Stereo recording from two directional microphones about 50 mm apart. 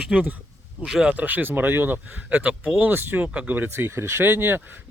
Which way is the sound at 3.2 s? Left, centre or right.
Right.